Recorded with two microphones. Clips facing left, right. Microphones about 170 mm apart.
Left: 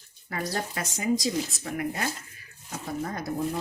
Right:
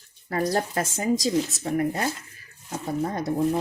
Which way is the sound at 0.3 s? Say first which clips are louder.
Right 7 dB; 40° right (ahead or behind).